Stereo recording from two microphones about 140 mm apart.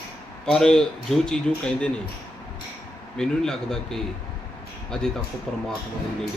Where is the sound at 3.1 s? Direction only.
5° left (ahead or behind).